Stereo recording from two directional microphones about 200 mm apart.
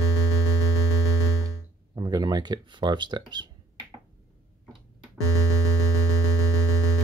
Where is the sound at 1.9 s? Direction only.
20° right (ahead or behind).